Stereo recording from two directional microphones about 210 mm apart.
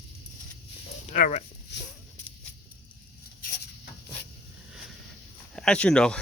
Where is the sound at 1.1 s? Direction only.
35° left (ahead or behind).